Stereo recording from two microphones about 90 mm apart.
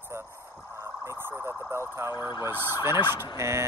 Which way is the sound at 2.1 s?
50° left (ahead or behind).